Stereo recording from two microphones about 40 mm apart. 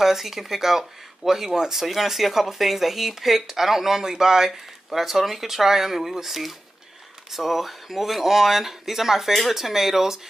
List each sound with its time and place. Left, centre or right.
0.0 s speech: centre